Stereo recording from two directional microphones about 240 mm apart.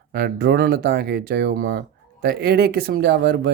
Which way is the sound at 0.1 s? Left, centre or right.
Right.